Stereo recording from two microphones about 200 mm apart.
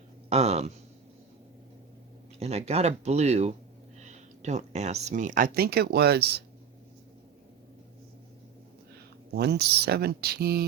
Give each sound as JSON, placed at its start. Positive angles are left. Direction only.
{"t": 0.3, "sound": "speech", "side_deg": -30}
{"t": 2.4, "sound": "speech", "side_deg": -30}
{"t": 9.3, "sound": "speech", "side_deg": -55}